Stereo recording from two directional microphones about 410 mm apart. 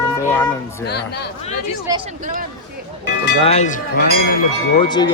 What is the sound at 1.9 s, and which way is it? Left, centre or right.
Speech, centre.